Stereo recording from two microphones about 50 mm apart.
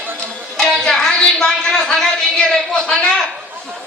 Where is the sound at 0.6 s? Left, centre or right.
Centre.